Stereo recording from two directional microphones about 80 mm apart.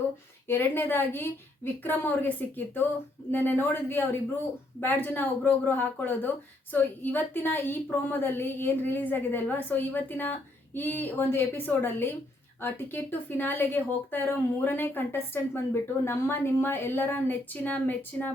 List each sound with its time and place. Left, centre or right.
0.4 s a woman's voice: left
3.3 s a woman's voice: left